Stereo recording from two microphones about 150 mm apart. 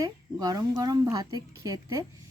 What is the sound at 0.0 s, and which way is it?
A woman's voice, 25° right (ahead or behind).